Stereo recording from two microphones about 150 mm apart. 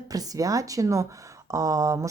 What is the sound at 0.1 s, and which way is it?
Speech, 25° right (ahead or behind).